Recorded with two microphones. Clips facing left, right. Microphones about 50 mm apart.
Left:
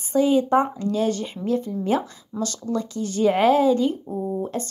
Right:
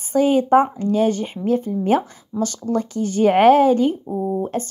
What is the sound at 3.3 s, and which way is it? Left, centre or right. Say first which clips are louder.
A woman's voice: right 5 dB; right.